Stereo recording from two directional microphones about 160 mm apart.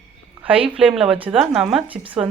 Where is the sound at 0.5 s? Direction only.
35° right (ahead or behind).